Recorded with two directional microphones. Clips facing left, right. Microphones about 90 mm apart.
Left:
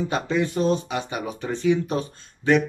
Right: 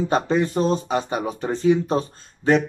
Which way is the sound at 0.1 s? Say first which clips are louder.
Right 4 dB; 35° right (ahead or behind).